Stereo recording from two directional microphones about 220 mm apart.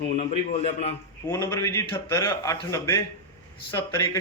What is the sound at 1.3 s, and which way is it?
A man's voice, 10° left (ahead or behind).